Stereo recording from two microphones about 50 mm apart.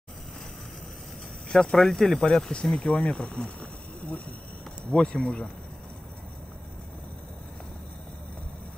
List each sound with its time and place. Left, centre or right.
1.5 s speech: centre
2.9 s speech: left
4.9 s speech: centre